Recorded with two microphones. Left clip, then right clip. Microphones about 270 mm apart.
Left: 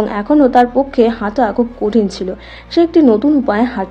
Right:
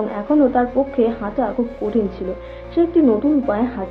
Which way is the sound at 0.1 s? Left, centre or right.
Left.